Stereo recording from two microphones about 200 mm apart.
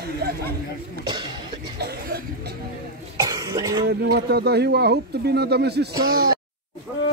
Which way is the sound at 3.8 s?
55° right (ahead or behind).